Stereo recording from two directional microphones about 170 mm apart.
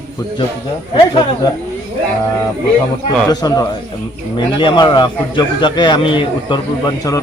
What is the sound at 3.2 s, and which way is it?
A man's voice, 25° left (ahead or behind).